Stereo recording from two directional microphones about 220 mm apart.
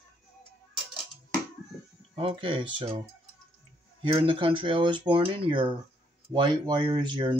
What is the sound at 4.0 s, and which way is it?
Speech, 25° right (ahead or behind).